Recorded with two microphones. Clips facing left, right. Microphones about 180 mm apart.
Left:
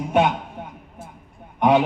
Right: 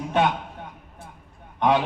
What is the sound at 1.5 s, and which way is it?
Speech, 15° left (ahead or behind).